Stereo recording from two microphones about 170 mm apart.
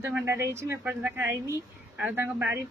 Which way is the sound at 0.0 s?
15° right (ahead or behind).